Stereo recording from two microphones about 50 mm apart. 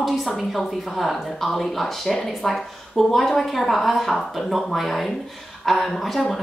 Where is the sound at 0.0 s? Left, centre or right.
Centre.